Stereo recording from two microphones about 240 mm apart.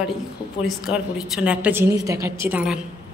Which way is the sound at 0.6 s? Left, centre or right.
Centre.